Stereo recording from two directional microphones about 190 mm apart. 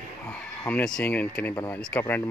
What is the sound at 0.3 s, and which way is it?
Speech, 10° left (ahead or behind).